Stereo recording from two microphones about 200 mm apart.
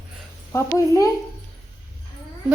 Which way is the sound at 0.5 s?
15° left (ahead or behind).